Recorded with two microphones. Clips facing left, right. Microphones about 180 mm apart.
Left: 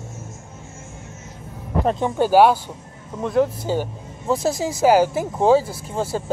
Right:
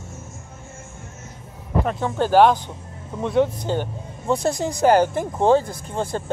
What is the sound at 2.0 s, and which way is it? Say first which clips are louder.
Speech: left 1 dB; 15° left (ahead or behind).